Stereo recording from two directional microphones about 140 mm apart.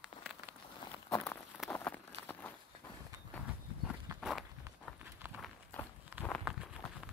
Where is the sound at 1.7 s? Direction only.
10° left (ahead or behind).